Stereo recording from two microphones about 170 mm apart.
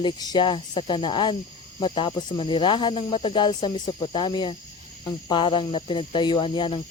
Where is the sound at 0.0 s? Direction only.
25° left (ahead or behind).